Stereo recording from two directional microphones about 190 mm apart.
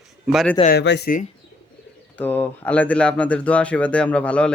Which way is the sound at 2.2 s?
10° left (ahead or behind).